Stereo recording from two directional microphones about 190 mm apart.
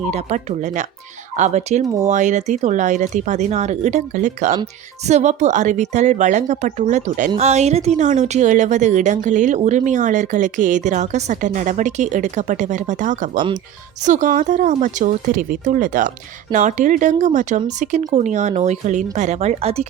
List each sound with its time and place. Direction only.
0.1 s a woman's voice: 40° right (ahead or behind)
1.8 s speech: 20° right (ahead or behind)
2.0 s a woman's voice: 40° right (ahead or behind)